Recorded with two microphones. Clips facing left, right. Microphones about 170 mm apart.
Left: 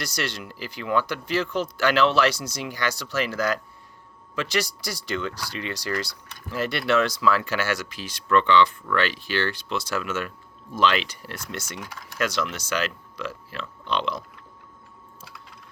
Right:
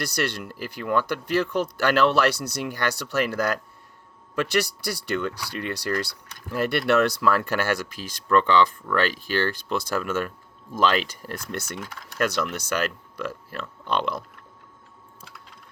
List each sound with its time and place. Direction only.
0.0 s speech: 55° right (ahead or behind)